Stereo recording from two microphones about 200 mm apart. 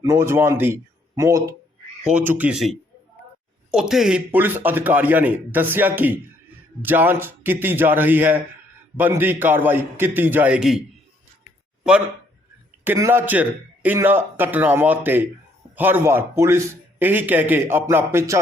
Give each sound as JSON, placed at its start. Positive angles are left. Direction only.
{"t": 0.0, "sound": "a man's voice", "side_deg": -15}